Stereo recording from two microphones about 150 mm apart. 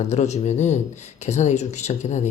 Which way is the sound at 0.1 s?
50° left (ahead or behind).